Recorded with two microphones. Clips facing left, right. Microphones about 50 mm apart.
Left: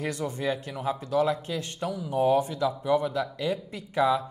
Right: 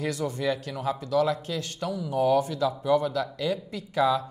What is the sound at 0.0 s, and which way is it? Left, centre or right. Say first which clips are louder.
Speech: right 2 dB; left.